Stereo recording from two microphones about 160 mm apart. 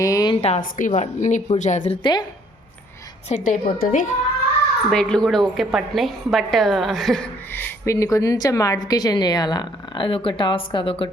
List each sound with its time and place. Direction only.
0.0 s a sound: 20° left (ahead or behind)
0.6 s a woman's voice: 55° left (ahead or behind)
1.9 s a woman's voice: 30° left (ahead or behind)
3.2 s a woman's voice: 50° left (ahead or behind)
4.9 s a woman's voice: 5° left (ahead or behind)
7.5 s a woman's voice: 15° left (ahead or behind); by 11.1 s 35° left (ahead or behind)